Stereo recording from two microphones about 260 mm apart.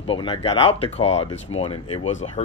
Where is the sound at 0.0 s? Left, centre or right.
Centre.